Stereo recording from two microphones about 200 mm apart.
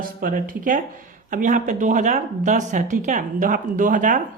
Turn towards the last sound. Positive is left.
turn(degrees=-40)  # may be behind; listen again after turning